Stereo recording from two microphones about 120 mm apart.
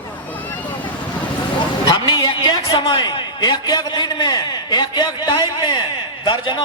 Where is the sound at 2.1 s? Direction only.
35° left (ahead or behind).